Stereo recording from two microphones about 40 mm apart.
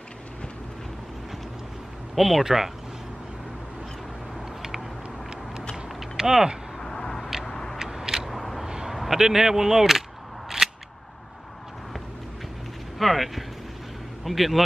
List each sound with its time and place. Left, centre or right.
2.1 s speech: centre
4.6 s a sound: centre
6.1 s speech: centre
6.8 s vehicle: centre
7.8 s vehicle: centre
8.3 s a sound: centre
8.6 s a sound: centre
8.9 s speech: centre
10.6 s single-lens reflex camera: centre
13.0 s speech: centre